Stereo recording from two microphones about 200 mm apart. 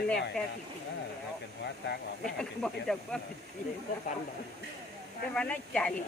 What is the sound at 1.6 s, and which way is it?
Speech, 55° left (ahead or behind).